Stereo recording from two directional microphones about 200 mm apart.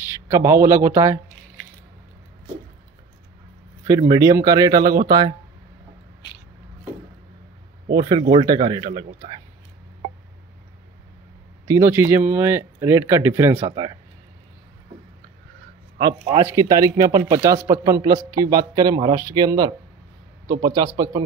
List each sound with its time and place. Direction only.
0.3 s a man's voice: 15° right (ahead or behind)
4.1 s a man's voice: 20° right (ahead or behind)
7.9 s speech: 25° right (ahead or behind)
11.6 s a man's voice: 15° right (ahead or behind)
13.7 s speech: 25° right (ahead or behind)
16.0 s a man's voice: 20° right (ahead or behind)